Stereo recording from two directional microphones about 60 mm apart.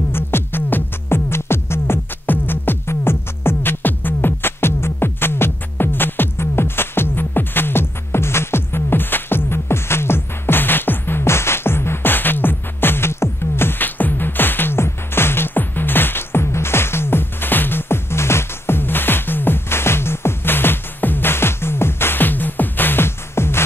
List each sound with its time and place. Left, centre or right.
0.1 s music: left